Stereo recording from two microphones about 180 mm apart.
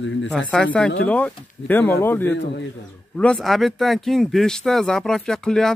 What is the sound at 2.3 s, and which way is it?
Speech, 75° left (ahead or behind).